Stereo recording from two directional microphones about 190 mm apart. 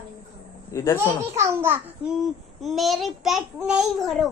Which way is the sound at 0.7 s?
15° left (ahead or behind).